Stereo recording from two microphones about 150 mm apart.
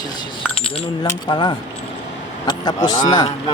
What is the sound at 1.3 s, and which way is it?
A man's voice, 30° left (ahead or behind).